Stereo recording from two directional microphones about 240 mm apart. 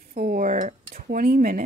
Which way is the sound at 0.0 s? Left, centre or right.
Right.